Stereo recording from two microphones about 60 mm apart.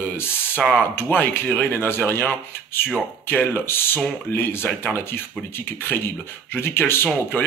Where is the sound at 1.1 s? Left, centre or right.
Left.